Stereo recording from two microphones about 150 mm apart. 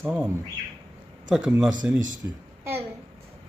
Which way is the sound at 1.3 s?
5° right (ahead or behind).